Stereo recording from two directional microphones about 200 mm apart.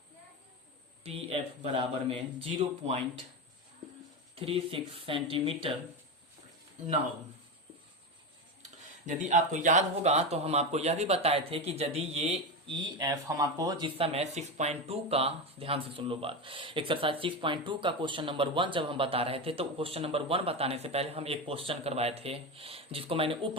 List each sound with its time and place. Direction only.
1.0 s speech: 30° right (ahead or behind)
4.4 s speech: 30° right (ahead or behind)
9.0 s speech: 40° right (ahead or behind)